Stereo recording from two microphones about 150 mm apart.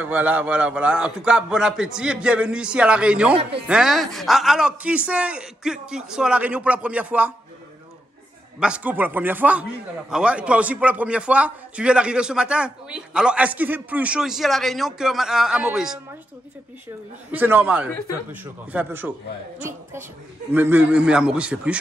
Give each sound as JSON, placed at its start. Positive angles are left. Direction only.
{"t": 0.0, "sound": "a man's voice", "side_deg": -10}
{"t": 8.5, "sound": "a man's voice", "side_deg": -5}
{"t": 17.3, "sound": "a man's voice", "side_deg": -10}
{"t": 20.5, "sound": "a man's voice", "side_deg": -15}